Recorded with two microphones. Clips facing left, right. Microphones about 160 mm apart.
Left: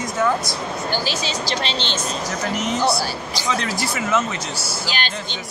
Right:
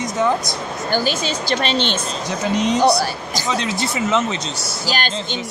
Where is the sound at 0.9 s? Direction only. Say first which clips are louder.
Right 7 dB; 50° right (ahead or behind).